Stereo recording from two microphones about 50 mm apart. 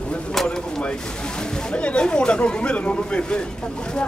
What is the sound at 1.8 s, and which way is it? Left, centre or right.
Speech, left.